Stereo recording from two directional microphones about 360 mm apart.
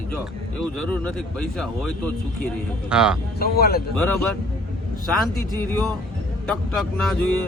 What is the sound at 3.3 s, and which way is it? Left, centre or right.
Speech, left.